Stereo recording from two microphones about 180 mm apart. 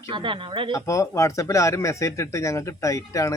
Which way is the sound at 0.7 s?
15° left (ahead or behind).